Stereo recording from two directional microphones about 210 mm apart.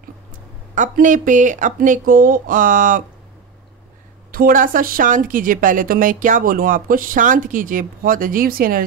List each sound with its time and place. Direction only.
0.7 s a woman's voice: 40° right (ahead or behind)
4.3 s a woman's voice: 40° right (ahead or behind)